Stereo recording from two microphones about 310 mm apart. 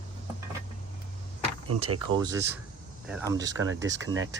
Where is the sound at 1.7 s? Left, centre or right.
Right.